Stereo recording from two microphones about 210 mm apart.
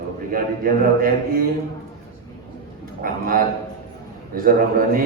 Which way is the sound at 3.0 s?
45° right (ahead or behind).